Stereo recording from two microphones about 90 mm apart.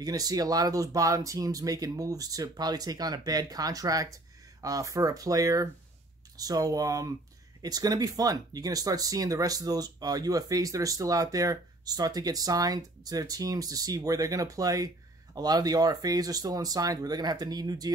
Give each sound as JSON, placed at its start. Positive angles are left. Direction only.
{"t": 0.0, "sound": "speech", "side_deg": -45}